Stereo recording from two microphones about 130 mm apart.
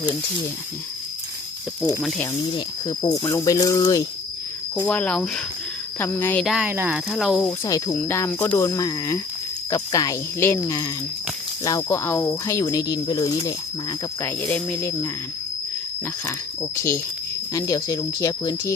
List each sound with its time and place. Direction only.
2.0 s speech: 5° left (ahead or behind)
2.6 s speech: 30° left (ahead or behind)
4.9 s speech: 10° left (ahead or behind)
6.4 s speech: 5° right (ahead or behind)
6.7 s speech: 15° right (ahead or behind)
7.1 s speech: centre (ahead or behind)
7.6 s speech: 30° left (ahead or behind)
7.9 s speech: 20° left (ahead or behind)
14.2 s speech: 15° left (ahead or behind)
16.2 s speech: 20° left (ahead or behind)